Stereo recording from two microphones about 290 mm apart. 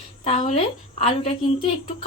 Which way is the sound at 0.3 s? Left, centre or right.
Left.